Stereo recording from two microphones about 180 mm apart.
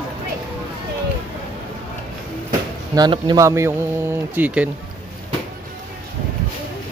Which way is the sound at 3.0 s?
25° right (ahead or behind).